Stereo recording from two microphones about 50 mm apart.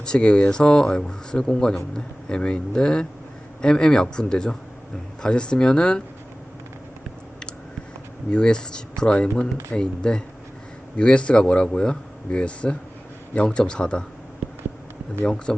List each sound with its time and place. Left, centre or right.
0.0 s speech: centre
8.3 s speech: centre
14.4 s a sound: centre
15.5 s speech: centre